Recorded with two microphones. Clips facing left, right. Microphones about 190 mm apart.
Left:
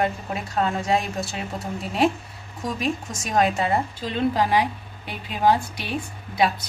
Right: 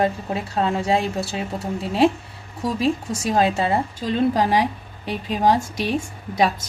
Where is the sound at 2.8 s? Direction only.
30° right (ahead or behind).